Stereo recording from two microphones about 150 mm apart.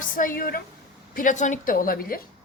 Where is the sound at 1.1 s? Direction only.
60° left (ahead or behind); by 2.2 s 75° left (ahead or behind).